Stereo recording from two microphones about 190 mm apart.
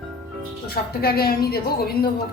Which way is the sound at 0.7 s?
55° left (ahead or behind).